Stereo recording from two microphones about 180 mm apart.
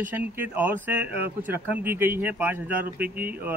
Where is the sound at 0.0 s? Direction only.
10° right (ahead or behind).